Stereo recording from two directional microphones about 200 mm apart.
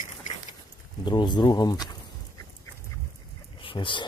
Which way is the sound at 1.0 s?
20° left (ahead or behind).